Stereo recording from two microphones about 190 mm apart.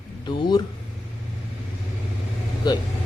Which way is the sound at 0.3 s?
25° left (ahead or behind).